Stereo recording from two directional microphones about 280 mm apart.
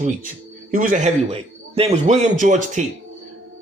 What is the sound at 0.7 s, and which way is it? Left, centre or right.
A man's voice, right.